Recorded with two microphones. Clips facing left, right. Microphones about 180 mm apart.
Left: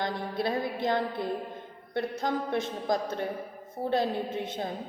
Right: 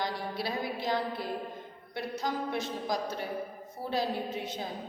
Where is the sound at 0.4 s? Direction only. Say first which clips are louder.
Left 5 dB; 55° left (ahead or behind).